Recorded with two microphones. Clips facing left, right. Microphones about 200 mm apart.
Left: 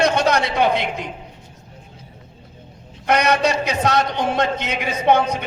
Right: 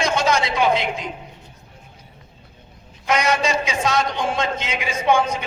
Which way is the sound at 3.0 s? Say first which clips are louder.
Left 3 dB; 60° left (ahead or behind).